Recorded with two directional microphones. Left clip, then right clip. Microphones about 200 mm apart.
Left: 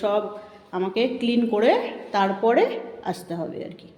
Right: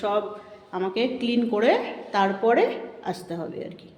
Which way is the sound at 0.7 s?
10° left (ahead or behind).